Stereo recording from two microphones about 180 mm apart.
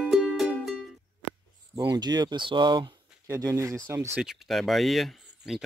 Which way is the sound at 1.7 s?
25° right (ahead or behind).